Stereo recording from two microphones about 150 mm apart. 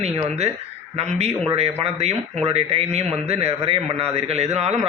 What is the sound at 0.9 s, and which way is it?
A man's voice, 45° right (ahead or behind).